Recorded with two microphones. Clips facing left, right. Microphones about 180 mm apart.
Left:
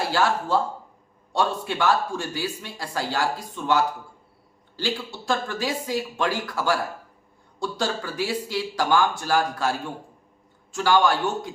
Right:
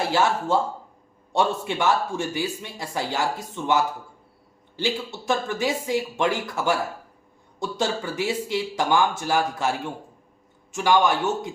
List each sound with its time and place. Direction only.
0.0 s speech: 20° right (ahead or behind)